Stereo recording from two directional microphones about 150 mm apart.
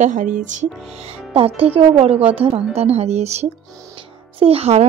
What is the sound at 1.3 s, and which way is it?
A woman's voice, 40° right (ahead or behind).